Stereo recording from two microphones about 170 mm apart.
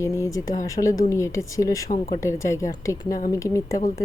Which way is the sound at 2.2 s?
15° left (ahead or behind).